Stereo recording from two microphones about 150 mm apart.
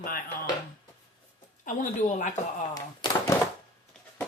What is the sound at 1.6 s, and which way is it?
Speech, 55° left (ahead or behind).